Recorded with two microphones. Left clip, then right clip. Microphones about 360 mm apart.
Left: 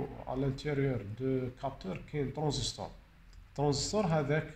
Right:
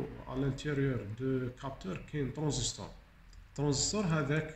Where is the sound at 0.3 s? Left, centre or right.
Left.